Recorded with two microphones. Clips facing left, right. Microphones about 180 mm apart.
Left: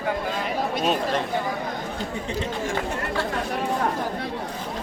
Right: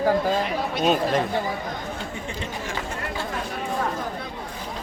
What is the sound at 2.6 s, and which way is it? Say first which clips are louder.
Chatter: left 4 dB; 55° left (ahead or behind).